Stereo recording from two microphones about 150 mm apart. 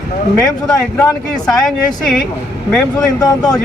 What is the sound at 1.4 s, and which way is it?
Speech, centre (ahead or behind).